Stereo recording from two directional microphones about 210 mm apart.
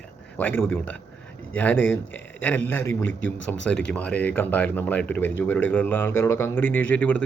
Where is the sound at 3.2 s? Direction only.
60° left (ahead or behind).